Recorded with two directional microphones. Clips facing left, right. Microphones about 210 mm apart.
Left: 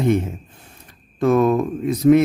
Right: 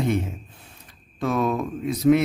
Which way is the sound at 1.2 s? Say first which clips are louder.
Left 7 dB; 50° left (ahead or behind).